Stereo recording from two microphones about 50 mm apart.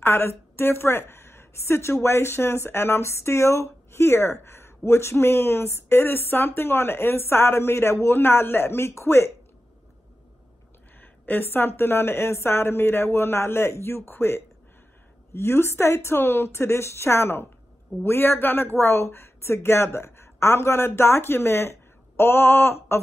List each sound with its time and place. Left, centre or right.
0.0 s a woman's voice: left
11.0 s a woman's voice: left